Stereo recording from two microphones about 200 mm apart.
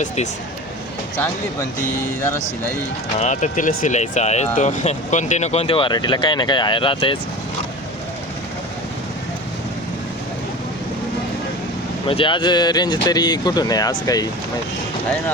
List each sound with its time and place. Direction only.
2.0 s speech: 15° left (ahead or behind)
3.2 s speech: 35° left (ahead or behind)
12.0 s speech: 25° left (ahead or behind)